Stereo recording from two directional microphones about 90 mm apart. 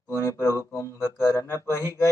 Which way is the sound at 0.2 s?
30° left (ahead or behind).